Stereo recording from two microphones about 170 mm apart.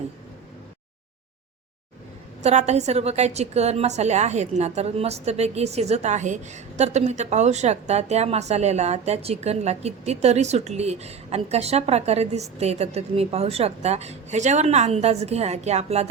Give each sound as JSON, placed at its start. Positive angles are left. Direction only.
{"t": 2.4, "sound": "a woman's voice", "side_deg": -40}